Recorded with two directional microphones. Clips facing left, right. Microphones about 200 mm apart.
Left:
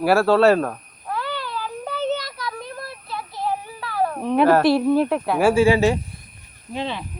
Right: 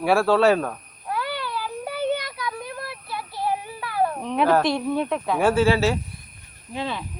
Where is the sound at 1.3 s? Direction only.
10° right (ahead or behind).